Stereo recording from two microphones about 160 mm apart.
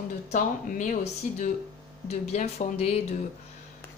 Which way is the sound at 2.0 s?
40° left (ahead or behind).